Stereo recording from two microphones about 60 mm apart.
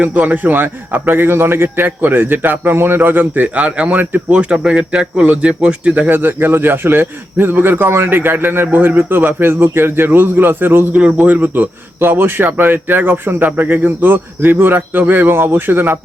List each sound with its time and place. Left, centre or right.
0.0 s a man's voice: right
6.1 s a man's voice: right
10.9 s a man's voice: right